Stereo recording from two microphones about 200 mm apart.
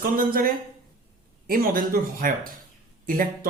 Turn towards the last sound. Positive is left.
turn(degrees=-45)  # may be behind; listen again after turning